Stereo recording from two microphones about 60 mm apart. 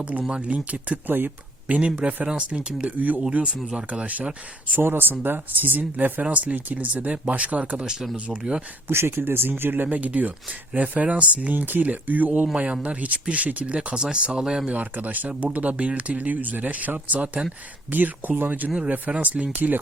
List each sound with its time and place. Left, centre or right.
0.0 s speech: right
3.2 s speech: centre
8.9 s speech: right
13.7 s speech: centre
14.7 s speech: right